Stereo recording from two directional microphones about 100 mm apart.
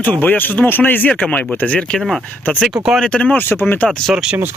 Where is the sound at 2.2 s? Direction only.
15° left (ahead or behind).